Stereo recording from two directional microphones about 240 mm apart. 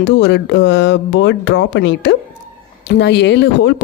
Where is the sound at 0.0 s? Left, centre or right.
Left.